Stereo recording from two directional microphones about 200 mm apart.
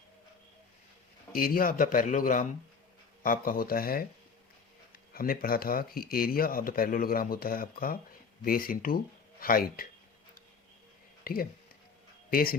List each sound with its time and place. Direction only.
1.3 s speech: 45° left (ahead or behind)
11.2 s speech: 45° left (ahead or behind)